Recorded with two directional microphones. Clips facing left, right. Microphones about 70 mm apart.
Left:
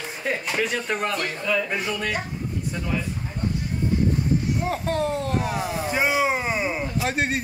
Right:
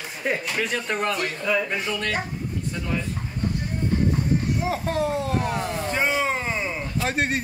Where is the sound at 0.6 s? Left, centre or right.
Centre.